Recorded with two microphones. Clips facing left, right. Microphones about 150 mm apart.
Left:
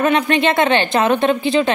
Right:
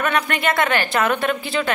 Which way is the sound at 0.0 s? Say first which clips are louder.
Left 6 dB; 25° left (ahead or behind).